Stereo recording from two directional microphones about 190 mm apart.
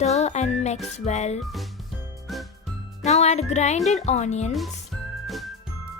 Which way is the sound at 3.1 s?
35° left (ahead or behind).